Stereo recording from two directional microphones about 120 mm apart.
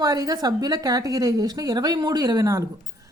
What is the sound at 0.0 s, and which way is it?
Speech, 30° right (ahead or behind).